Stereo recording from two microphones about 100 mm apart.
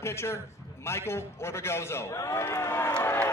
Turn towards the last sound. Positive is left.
turn(degrees=20)  # may be behind; listen again after turning